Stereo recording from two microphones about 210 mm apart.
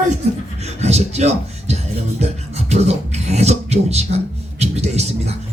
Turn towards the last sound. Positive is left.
turn(degrees=-30)  # may be behind; listen again after turning